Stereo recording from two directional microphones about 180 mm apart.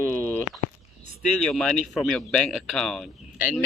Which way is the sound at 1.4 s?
Centre (ahead or behind).